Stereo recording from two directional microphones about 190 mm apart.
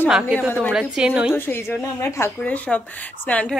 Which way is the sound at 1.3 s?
10° left (ahead or behind).